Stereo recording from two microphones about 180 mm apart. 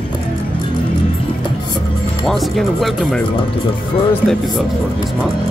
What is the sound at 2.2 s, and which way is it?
Music, centre (ahead or behind).